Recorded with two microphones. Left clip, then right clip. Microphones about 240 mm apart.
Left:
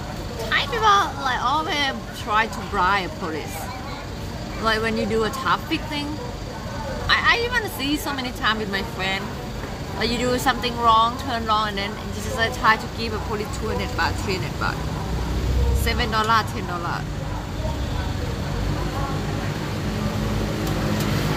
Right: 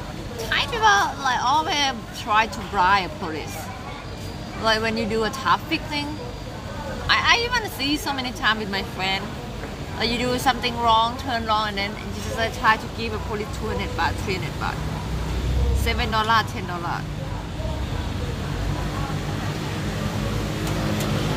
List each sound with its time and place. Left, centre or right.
0.5 s speech: centre
4.6 s speech: centre
7.1 s speech: centre
15.8 s speech: centre